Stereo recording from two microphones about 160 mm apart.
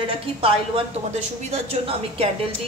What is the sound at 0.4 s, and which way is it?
A woman's voice, 40° right (ahead or behind).